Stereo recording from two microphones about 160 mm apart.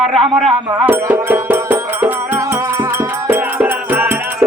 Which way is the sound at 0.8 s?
15° right (ahead or behind).